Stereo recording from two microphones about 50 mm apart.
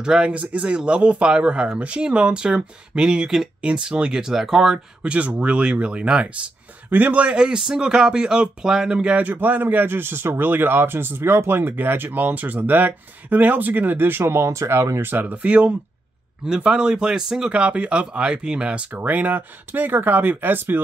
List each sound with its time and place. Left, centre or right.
0.0 s speech: centre
0.3 s speech: right; by 4.7 s centre
5.0 s speech: right
6.9 s speech: right
7.2 s speech: centre
9.2 s speech: right
14.4 s speech: right
15.0 s speech: right
15.3 s speech: right
18.9 s speech: right